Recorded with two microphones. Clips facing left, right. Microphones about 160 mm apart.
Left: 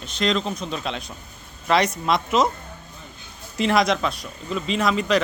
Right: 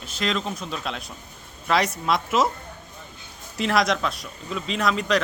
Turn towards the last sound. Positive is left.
turn(degrees=0)  # may be behind; listen again after turning